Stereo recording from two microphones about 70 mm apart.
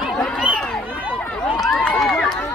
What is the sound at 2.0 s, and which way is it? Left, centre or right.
Run, centre.